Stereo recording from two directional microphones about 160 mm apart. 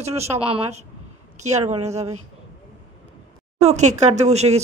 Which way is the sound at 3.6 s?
45° right (ahead or behind).